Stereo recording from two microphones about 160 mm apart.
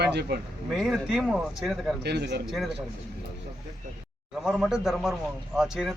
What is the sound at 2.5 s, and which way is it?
Speech, centre (ahead or behind).